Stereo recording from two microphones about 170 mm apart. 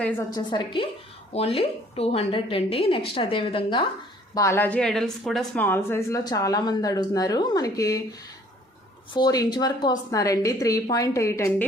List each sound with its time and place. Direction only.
0.3 s a woman's voice: 30° left (ahead or behind)
4.4 s a woman's voice: 15° left (ahead or behind)
9.1 s a woman's voice: 20° left (ahead or behind)